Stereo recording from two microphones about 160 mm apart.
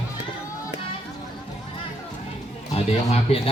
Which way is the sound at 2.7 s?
40° left (ahead or behind).